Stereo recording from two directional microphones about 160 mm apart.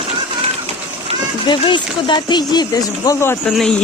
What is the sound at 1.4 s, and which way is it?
Speech, 30° left (ahead or behind).